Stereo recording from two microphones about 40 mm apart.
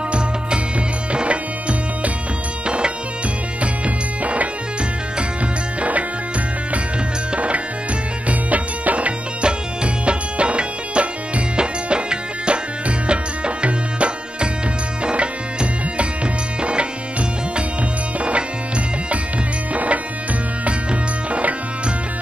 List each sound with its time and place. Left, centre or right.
1.1 s music: right
4.2 s music: right
5.8 s music: right
7.3 s music: right
13.0 s tabla: right
15.0 s music: right
19.7 s tabla: right
21.3 s music: right